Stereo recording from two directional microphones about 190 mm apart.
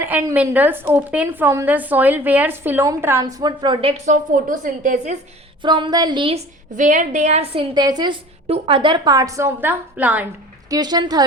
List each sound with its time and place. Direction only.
0.0 s a woman's voice: 10° right (ahead or behind); by 4.1 s 30° right (ahead or behind)
4.1 s a woman's voice: 45° right (ahead or behind)
5.6 s a woman's voice: 25° right (ahead or behind)
6.7 s a woman's voice: 40° right (ahead or behind); by 10.2 s 10° right (ahead or behind)
10.7 s a woman's voice: 20° right (ahead or behind)